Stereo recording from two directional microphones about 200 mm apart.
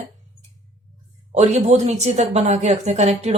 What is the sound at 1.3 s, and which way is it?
Speech, 35° right (ahead or behind).